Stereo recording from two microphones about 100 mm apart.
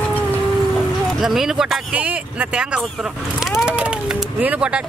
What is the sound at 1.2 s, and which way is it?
Speech, 5° right (ahead or behind).